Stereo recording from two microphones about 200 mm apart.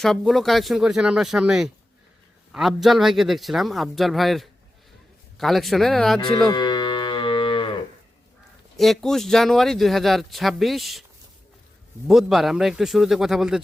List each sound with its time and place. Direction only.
0.0 s speech: centre (ahead or behind)
6.1 s livestock: 20° left (ahead or behind)
8.7 s speech: centre (ahead or behind)
12.0 s speech: centre (ahead or behind)